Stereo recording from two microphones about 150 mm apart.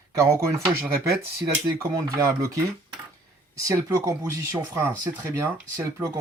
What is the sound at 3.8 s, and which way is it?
Speech, 20° right (ahead or behind).